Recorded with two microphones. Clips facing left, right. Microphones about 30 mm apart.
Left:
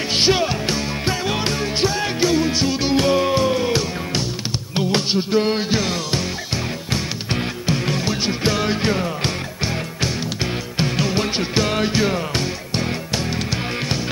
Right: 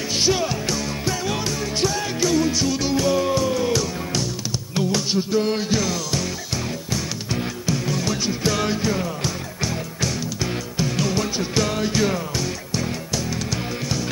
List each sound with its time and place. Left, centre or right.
0.1 s music: left
8.0 s music: left
12.4 s music: left